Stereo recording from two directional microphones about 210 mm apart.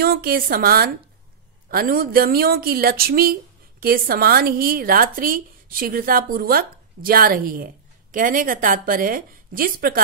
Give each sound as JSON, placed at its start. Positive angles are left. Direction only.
{"t": 0.0, "sound": "a woman's voice", "side_deg": -45}